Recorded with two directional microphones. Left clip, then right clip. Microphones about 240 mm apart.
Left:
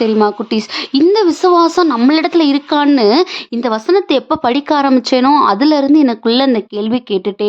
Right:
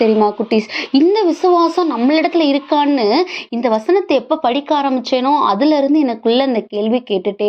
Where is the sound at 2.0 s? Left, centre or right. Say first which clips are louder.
Left 2 dB; left.